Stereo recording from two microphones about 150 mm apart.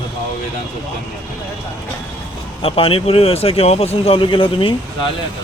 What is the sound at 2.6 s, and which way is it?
Speech, 40° left (ahead or behind).